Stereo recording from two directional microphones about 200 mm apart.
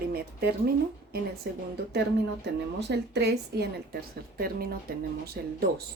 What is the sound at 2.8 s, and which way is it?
A woman's voice, 55° right (ahead or behind).